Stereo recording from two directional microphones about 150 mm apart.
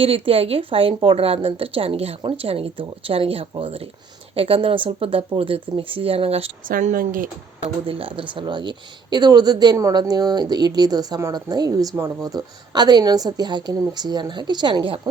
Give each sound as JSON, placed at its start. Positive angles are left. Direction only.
{"t": 0.0, "sound": "a woman's voice", "side_deg": -40}
{"t": 6.7, "sound": "speech", "side_deg": -65}
{"t": 7.9, "sound": "speech", "side_deg": -40}